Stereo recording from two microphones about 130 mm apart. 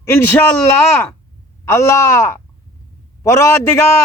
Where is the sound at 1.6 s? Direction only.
20° left (ahead or behind).